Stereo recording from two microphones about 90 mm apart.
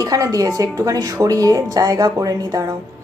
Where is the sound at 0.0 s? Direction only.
40° right (ahead or behind).